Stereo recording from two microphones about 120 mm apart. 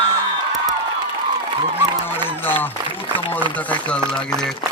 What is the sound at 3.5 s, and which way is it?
Speech, 10° left (ahead or behind).